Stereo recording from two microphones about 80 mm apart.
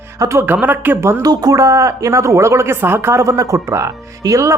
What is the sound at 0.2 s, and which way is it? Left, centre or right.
Speech, right.